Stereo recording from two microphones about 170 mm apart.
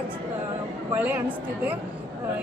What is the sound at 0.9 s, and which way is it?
Speech, 10° right (ahead or behind).